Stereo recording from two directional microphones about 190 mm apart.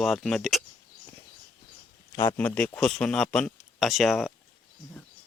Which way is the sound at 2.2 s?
10° left (ahead or behind).